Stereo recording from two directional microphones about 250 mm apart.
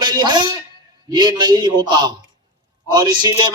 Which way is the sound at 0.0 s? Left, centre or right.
Centre.